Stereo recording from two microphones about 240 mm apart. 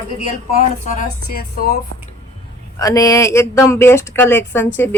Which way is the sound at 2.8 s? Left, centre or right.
Centre.